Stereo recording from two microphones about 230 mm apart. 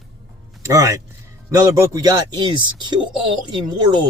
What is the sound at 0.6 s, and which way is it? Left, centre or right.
Speech, centre.